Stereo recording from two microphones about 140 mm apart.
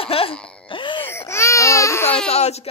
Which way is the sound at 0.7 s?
35° left (ahead or behind).